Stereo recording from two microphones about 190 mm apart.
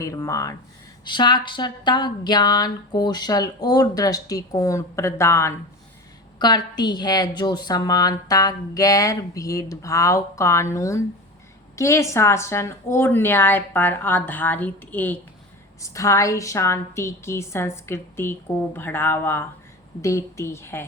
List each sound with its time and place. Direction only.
0.0 s a woman's voice: 15° left (ahead or behind)